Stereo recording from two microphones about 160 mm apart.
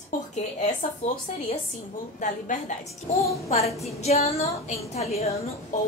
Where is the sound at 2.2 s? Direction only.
55° left (ahead or behind).